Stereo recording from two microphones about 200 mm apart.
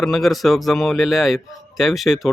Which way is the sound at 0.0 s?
Centre (ahead or behind).